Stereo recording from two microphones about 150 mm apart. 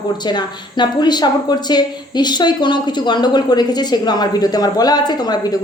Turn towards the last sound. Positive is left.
turn(degrees=30)  # may be behind; listen again after turning